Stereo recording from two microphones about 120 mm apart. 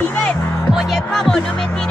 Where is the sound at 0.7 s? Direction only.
Centre (ahead or behind).